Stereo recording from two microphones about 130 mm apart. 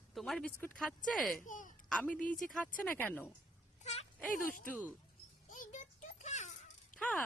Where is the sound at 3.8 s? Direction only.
55° left (ahead or behind).